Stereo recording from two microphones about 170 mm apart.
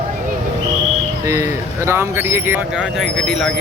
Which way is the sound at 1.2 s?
20° right (ahead or behind).